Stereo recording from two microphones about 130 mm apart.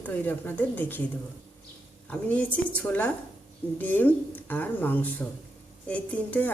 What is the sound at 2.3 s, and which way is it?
A woman's voice, 10° left (ahead or behind).